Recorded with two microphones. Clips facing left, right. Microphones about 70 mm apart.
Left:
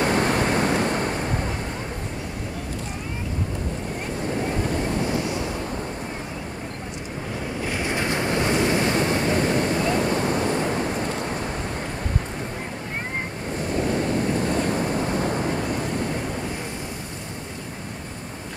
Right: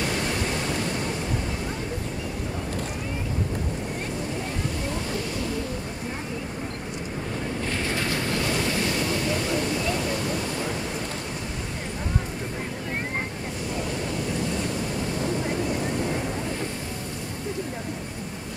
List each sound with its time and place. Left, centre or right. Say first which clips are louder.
0.0 s waves: left 6 dB; left
7.6 s waves: left 4 dB; centre; by 10.9 s left
14.1 s wind noise: left 5 dB; left